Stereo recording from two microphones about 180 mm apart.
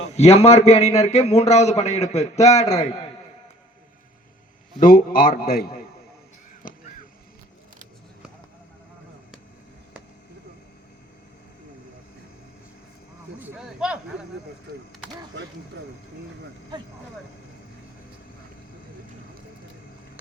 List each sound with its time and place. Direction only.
0.2 s a man's voice: 35° left (ahead or behind)
4.8 s a man's voice: 55° left (ahead or behind)
13.4 s a sound: 5° right (ahead or behind)